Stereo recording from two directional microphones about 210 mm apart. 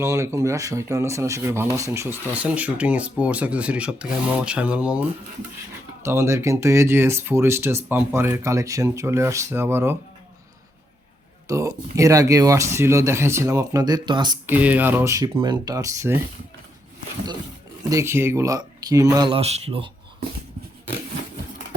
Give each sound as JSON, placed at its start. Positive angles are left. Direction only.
{"t": 0.0, "sound": "speech", "side_deg": -15}
{"t": 6.0, "sound": "speech", "side_deg": -15}
{"t": 11.4, "sound": "speech", "side_deg": -15}
{"t": 14.4, "sound": "speech", "side_deg": -10}
{"t": 17.8, "sound": "speech", "side_deg": -15}